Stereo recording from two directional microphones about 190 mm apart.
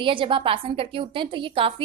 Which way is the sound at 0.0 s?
25° right (ahead or behind).